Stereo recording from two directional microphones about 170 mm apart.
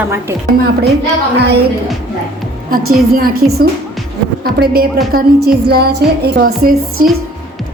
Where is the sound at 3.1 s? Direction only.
65° right (ahead or behind).